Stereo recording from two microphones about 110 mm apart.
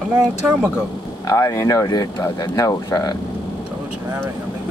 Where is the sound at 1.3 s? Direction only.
30° left (ahead or behind).